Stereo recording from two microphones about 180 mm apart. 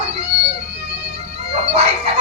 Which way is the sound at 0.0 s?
35° right (ahead or behind).